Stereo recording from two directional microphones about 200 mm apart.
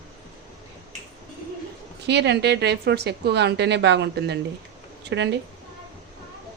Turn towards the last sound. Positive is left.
turn(degrees=-60)  # may be behind; listen again after turning